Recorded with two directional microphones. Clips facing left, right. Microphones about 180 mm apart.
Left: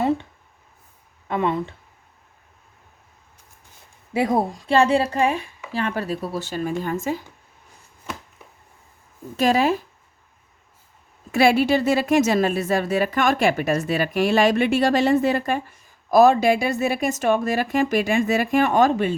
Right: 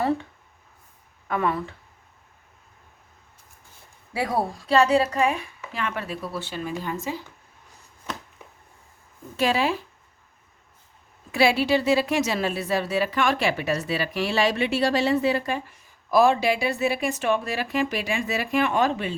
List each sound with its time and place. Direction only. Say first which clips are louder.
1.3 s speech: left 3 dB; 20° left (ahead or behind)
4.1 s a woman's voice: left 5 dB; 20° left (ahead or behind); by 7.2 s 50° left (ahead or behind)
9.4 s a woman's voice: left 4 dB; 45° left (ahead or behind)
11.3 s a woman's voice: left 3 dB; 50° left (ahead or behind)